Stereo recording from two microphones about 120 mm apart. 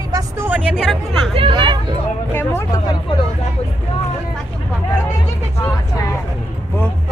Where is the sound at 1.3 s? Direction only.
45° right (ahead or behind).